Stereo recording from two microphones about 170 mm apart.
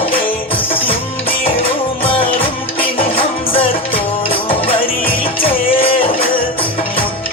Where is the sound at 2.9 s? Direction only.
35° left (ahead or behind).